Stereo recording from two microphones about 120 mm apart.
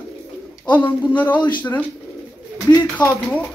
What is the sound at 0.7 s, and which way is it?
Speech, 15° left (ahead or behind).